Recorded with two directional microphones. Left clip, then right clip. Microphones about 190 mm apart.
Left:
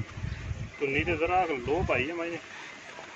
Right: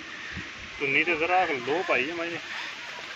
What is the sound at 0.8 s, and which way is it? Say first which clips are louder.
Speech: right 4 dB; 25° right (ahead or behind).